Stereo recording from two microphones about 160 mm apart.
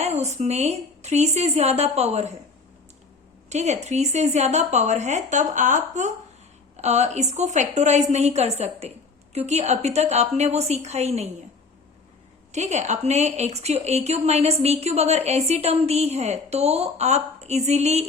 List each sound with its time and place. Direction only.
0.0 s speech: 45° right (ahead or behind)
3.5 s speech: 45° right (ahead or behind)
12.5 s speech: 45° right (ahead or behind)